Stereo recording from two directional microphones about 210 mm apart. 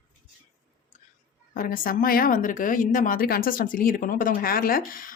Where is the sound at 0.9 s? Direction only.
35° left (ahead or behind).